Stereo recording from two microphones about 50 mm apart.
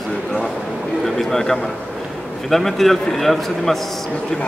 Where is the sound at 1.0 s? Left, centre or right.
Centre.